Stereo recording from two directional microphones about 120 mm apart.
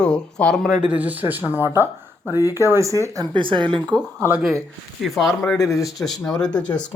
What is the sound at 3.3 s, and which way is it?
Speech, 45° right (ahead or behind).